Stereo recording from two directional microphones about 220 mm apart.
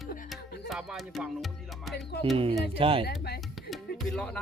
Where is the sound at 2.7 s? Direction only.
25° right (ahead or behind).